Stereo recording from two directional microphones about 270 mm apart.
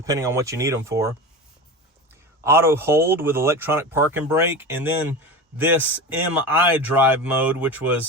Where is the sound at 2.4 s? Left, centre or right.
Centre.